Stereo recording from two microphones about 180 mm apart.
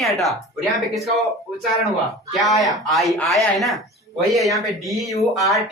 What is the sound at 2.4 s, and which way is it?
Speech, centre (ahead or behind).